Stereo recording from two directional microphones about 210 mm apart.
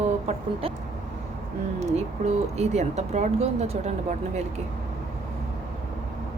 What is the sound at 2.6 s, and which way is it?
A woman's voice, 30° right (ahead or behind).